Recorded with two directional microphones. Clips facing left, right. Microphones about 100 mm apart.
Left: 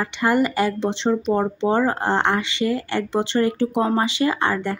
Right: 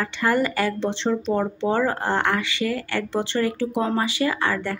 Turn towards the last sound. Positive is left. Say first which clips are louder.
# left 3 dB
turn(degrees=20)  # may be behind; listen again after turning